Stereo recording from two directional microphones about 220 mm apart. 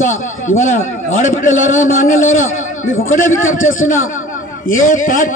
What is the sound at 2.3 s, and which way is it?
A man's voice, 65° left (ahead or behind).